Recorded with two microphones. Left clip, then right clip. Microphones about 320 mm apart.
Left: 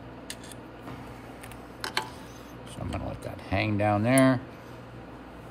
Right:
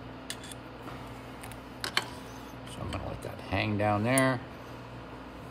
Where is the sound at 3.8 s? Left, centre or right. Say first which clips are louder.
Left 4 dB; left.